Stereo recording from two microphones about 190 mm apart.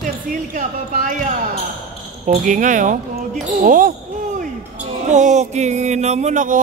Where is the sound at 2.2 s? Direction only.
40° right (ahead or behind).